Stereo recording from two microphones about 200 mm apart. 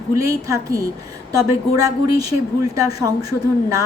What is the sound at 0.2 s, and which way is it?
A woman's voice, 15° right (ahead or behind).